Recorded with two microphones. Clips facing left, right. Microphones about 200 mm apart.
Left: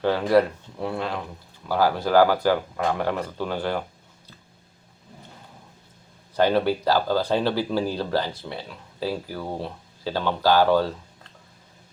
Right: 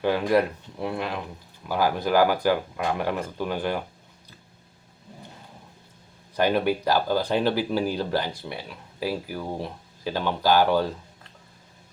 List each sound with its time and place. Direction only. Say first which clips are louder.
0.0 s speech: left 2 dB; 15° right (ahead or behind)
6.3 s speech: left 2 dB; 15° right (ahead or behind)